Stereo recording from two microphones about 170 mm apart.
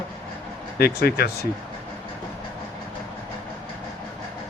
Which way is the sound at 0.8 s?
65° left (ahead or behind).